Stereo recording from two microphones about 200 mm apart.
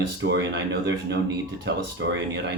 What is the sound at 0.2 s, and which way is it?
Speech, 60° right (ahead or behind).